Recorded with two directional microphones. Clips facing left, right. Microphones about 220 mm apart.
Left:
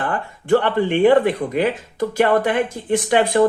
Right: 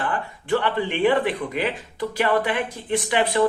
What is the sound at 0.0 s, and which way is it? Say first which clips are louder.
Speech: left 3 dB; 45° left (ahead or behind).